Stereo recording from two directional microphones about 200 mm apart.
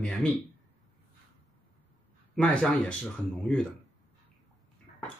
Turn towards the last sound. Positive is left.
turn(degrees=5)  # may be behind; listen again after turning